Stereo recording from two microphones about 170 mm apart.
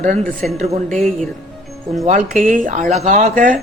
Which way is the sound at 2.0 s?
50° right (ahead or behind).